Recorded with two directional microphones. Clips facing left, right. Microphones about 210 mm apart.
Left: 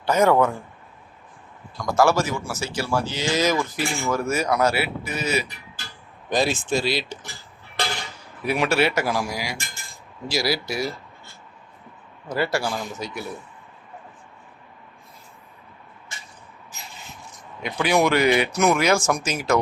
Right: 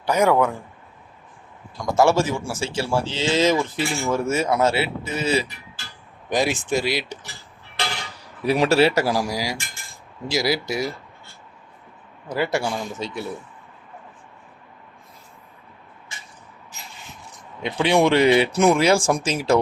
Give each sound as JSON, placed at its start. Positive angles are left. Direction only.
{"t": 0.0, "sound": "speech", "side_deg": -10}
{"t": 1.8, "sound": "speech", "side_deg": -25}
{"t": 6.3, "sound": "speech", "side_deg": -15}
{"t": 8.4, "sound": "speech", "side_deg": -35}
{"t": 10.2, "sound": "speech", "side_deg": -20}
{"t": 12.3, "sound": "speech", "side_deg": -20}
{"t": 17.6, "sound": "speech", "side_deg": -30}